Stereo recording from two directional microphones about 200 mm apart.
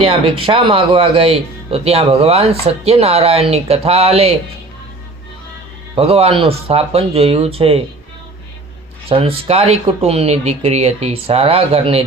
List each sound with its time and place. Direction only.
0.0 s speech: 25° right (ahead or behind)
5.9 s speech: 30° right (ahead or behind)
9.0 s speech: 30° right (ahead or behind)